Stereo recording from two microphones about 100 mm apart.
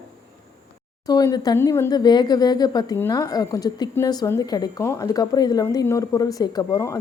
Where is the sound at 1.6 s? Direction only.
25° left (ahead or behind).